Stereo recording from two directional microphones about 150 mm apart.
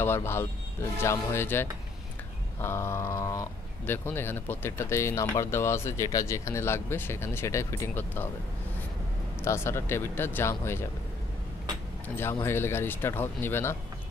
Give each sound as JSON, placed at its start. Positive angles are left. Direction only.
{"t": 0.0, "sound": "speech", "side_deg": 15}
{"t": 9.4, "sound": "speech", "side_deg": 15}
{"t": 12.2, "sound": "speech", "side_deg": 15}